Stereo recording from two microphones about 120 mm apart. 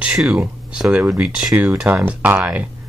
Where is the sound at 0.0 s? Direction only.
5° right (ahead or behind).